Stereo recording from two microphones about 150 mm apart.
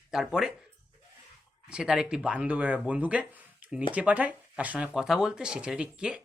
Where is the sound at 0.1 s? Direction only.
5° right (ahead or behind).